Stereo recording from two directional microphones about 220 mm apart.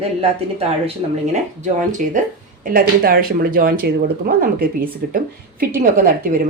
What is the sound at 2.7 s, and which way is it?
Speech, 40° right (ahead or behind).